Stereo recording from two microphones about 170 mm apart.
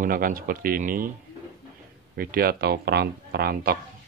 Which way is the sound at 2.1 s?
60° right (ahead or behind).